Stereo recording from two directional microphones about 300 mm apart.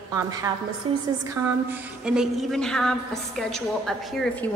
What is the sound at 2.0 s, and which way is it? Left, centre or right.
A woman's voice, centre.